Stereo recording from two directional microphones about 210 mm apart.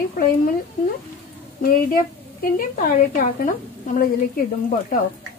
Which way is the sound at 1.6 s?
45° left (ahead or behind).